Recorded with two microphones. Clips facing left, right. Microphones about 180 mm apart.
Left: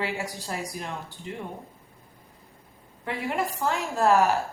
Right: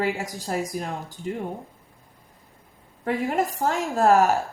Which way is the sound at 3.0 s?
45° right (ahead or behind).